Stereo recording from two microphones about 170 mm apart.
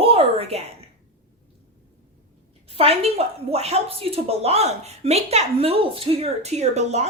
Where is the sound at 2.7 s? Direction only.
35° right (ahead or behind).